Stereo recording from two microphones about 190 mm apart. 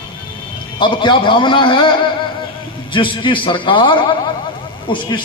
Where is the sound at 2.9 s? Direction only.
25° left (ahead or behind).